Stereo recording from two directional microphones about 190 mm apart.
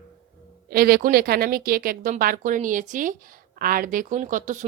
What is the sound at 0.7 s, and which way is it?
A woman's voice, 50° right (ahead or behind).